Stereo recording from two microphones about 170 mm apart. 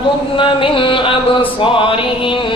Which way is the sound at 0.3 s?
30° left (ahead or behind).